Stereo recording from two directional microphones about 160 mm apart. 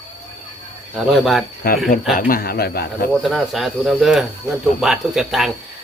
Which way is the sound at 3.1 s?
Centre (ahead or behind).